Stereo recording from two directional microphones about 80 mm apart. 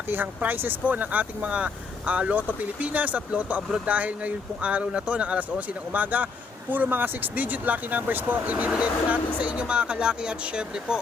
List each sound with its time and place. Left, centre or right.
0.1 s speech: right